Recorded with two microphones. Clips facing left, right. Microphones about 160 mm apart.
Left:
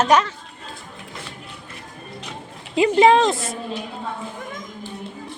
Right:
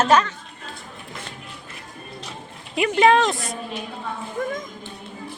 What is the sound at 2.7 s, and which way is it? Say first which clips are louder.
Speech: left 3 dB; 25° left (ahead or behind).